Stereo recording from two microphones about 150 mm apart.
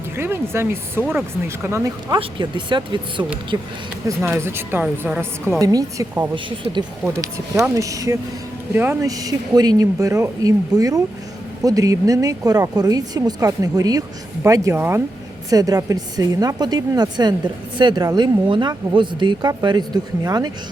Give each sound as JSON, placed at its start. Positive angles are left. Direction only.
{"t": 0.2, "sound": "speech", "side_deg": -15}
{"t": 2.1, "sound": "speech", "side_deg": -30}
{"t": 5.5, "sound": "speech", "side_deg": -25}
{"t": 7.8, "sound": "speech", "side_deg": -20}